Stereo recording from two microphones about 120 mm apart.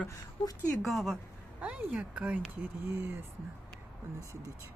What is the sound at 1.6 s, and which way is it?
Speech, 10° right (ahead or behind).